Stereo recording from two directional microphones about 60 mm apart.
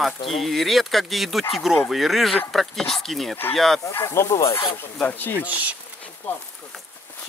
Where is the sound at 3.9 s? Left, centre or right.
Left.